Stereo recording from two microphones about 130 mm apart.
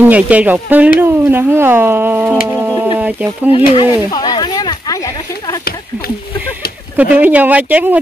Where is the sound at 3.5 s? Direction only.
45° left (ahead or behind); by 5.6 s 25° left (ahead or behind).